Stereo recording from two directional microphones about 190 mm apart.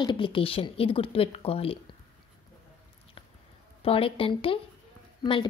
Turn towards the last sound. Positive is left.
turn(degrees=25)  # may be behind; listen again after turning